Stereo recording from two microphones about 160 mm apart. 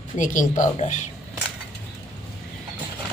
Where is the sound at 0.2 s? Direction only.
55° left (ahead or behind).